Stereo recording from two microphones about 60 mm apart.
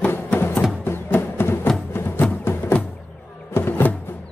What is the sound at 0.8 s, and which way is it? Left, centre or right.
Music, left.